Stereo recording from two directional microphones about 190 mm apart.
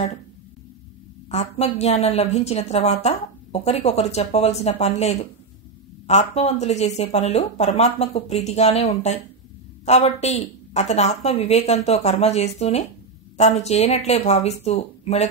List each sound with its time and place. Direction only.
1.3 s a woman's voice: 35° left (ahead or behind)